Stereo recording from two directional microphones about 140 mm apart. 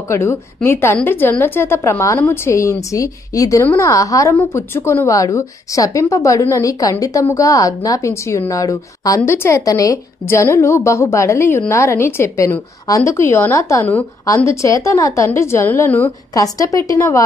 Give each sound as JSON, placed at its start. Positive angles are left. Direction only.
{"t": 0.1, "sound": "a woman's voice", "side_deg": 20}
{"t": 16.3, "sound": "a woman's voice", "side_deg": 25}